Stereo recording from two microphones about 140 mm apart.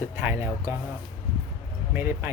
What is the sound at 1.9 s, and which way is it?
Speech, 15° right (ahead or behind).